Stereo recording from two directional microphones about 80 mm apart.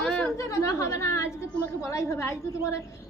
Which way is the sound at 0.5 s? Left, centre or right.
Left.